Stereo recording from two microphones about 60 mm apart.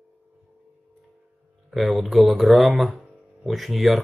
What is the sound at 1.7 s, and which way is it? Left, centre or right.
Speech, centre.